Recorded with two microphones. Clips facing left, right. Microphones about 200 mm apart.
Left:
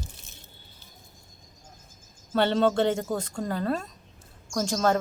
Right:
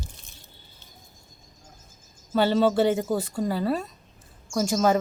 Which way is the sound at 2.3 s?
5° right (ahead or behind).